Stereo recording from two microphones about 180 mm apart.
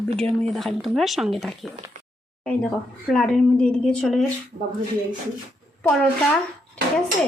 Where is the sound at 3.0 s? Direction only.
5° left (ahead or behind).